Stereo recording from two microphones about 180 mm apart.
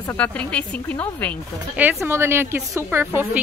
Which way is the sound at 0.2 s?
5° left (ahead or behind).